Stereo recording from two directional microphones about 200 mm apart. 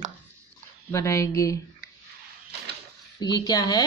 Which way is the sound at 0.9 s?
15° left (ahead or behind).